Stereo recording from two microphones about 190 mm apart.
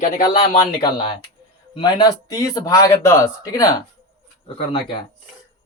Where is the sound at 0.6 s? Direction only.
25° left (ahead or behind).